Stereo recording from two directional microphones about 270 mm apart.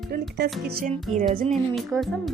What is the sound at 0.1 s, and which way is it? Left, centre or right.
Speech, right.